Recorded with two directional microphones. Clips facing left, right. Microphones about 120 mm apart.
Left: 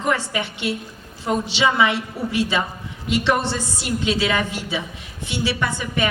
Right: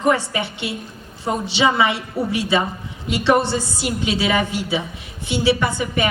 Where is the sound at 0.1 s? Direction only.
20° right (ahead or behind).